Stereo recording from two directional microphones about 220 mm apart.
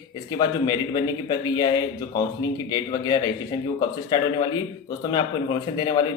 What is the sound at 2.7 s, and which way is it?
Speech, 20° left (ahead or behind).